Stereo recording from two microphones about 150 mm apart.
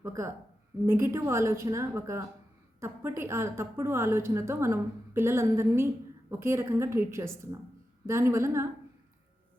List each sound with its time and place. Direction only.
0.0 s a woman's voice: 20° right (ahead or behind)